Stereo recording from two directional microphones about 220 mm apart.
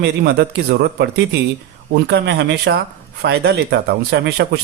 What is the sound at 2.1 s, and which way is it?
Speech, 50° right (ahead or behind).